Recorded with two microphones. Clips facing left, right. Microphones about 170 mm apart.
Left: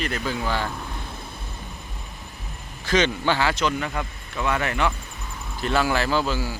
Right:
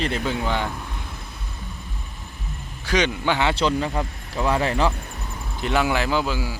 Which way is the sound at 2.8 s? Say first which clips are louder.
Even; 10° right (ahead or behind).